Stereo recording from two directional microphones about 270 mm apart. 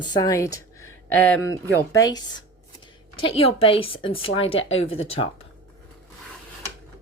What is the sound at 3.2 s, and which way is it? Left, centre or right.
A woman's voice, left.